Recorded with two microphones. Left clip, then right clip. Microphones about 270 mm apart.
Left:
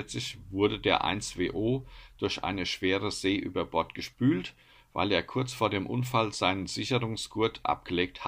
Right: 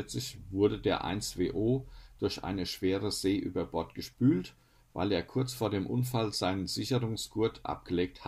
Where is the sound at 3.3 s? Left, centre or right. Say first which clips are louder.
Left 2 dB; left.